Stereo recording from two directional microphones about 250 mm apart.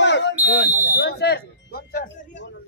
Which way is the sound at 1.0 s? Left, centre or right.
Left.